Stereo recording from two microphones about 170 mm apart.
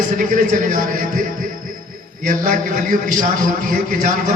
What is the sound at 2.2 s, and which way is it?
A man's voice, 50° right (ahead or behind).